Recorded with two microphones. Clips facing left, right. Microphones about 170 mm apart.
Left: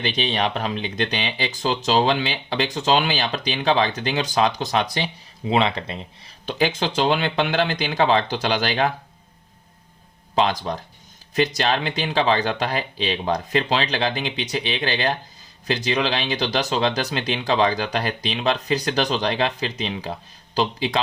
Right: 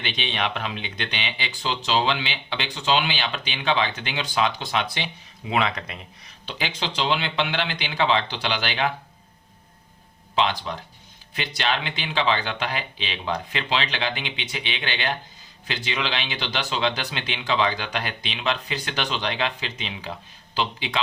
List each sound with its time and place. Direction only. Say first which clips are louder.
0.0 s speech: left 5 dB; 40° left (ahead or behind)
6.4 s speech: left 8 dB; 45° left (ahead or behind)
10.3 s speech: left 3 dB; 40° left (ahead or behind)